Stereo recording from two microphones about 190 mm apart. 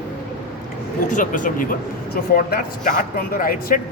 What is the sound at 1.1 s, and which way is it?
Speech, 45° left (ahead or behind).